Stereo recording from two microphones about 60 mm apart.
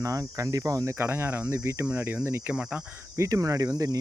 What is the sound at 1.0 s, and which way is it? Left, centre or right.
Speech, right.